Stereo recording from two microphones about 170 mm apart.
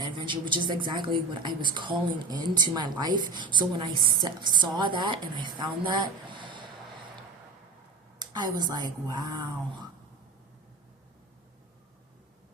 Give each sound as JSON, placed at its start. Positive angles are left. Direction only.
{"t": 0.2, "sound": "a woman's voice", "side_deg": -30}
{"t": 8.2, "sound": "a woman's voice", "side_deg": -25}